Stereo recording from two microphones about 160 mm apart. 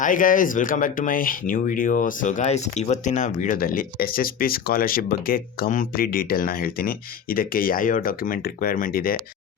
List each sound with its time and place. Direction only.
0.0 s speech: 55° left (ahead or behind)